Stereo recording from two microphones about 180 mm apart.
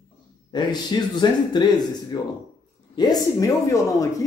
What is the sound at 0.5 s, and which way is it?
A man's voice, 25° left (ahead or behind).